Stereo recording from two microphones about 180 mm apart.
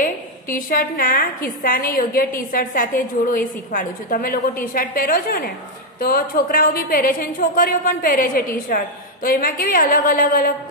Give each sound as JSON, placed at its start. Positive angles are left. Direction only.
{"t": 0.0, "sound": "a woman's voice", "side_deg": 50}